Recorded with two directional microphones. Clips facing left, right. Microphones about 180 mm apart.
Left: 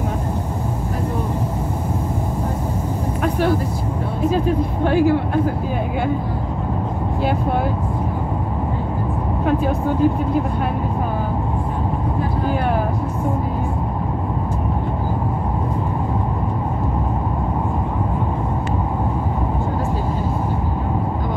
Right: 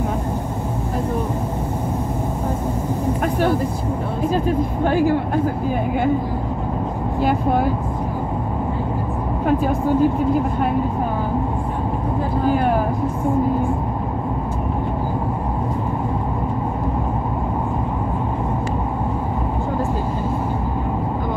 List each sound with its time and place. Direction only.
4.8 s speech: 45° right (ahead or behind)